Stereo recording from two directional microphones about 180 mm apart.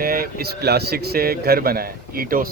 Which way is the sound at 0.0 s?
55° right (ahead or behind).